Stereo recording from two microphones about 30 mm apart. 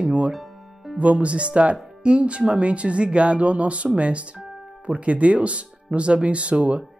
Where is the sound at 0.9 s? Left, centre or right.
Right.